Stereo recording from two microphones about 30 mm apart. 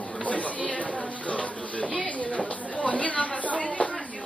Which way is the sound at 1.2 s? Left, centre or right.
Left.